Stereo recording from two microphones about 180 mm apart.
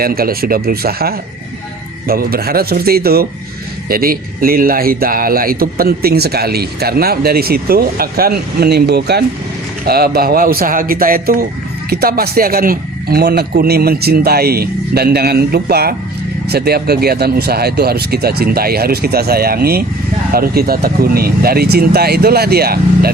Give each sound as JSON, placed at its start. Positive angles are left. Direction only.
{"t": 0.0, "sound": "speech", "side_deg": -55}